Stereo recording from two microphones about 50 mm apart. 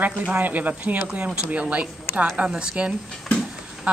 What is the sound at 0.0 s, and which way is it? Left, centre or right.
Speech, right.